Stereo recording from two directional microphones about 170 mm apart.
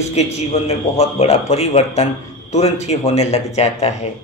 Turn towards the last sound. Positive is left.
turn(degrees=40)  # may be behind; listen again after turning